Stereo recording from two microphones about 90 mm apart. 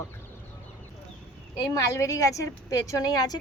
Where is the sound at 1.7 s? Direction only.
35° left (ahead or behind).